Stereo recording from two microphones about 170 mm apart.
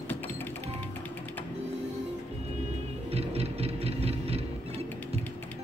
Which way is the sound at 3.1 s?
35° right (ahead or behind).